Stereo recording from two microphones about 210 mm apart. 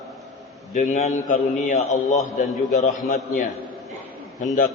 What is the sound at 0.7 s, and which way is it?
A man's voice, 35° left (ahead or behind).